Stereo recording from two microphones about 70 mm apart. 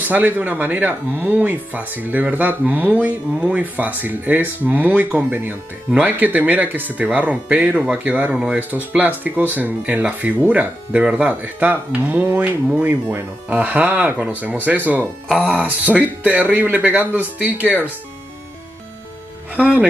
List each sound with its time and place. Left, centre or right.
0.0 s speech: right
8.7 s speech: right
19.5 s speech: right